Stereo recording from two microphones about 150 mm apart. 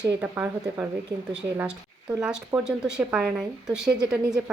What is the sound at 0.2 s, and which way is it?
A woman's voice, 10° right (ahead or behind).